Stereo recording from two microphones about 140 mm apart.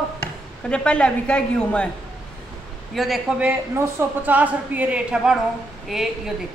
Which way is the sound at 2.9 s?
Centre (ahead or behind).